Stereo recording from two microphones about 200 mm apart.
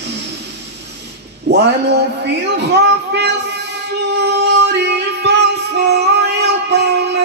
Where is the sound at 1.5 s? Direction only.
55° right (ahead or behind).